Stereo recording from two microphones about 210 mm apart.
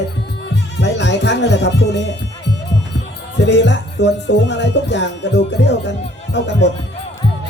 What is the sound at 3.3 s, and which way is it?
Speech, 55° left (ahead or behind).